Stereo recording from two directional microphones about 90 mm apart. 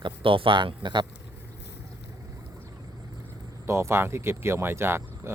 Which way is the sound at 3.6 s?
30° right (ahead or behind).